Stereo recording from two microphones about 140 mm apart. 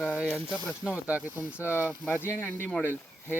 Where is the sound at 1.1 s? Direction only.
10° right (ahead or behind).